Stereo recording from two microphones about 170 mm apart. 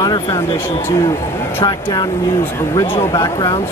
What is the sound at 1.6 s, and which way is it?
Speech, 25° left (ahead or behind).